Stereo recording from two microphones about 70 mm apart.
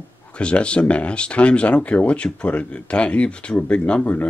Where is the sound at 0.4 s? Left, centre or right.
Centre.